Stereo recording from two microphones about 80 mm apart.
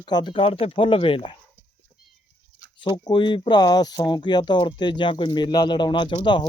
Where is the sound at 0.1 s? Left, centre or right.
Left.